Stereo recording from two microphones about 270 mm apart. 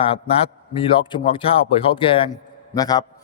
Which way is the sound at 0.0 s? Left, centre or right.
Left.